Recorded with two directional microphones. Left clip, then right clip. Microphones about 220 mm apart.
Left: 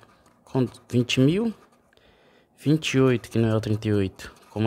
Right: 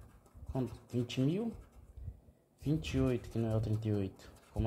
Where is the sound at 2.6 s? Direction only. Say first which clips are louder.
Left 14 dB; 35° left (ahead or behind).